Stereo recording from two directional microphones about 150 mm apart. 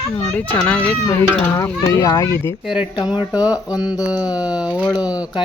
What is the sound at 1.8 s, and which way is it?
Speech, 20° left (ahead or behind).